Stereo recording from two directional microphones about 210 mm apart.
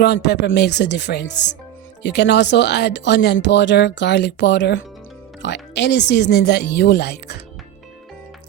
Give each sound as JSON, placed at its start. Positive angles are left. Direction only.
{"t": 0.0, "sound": "speech", "side_deg": 50}